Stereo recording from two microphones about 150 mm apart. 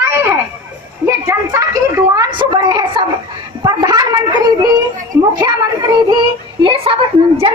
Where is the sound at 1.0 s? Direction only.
20° right (ahead or behind).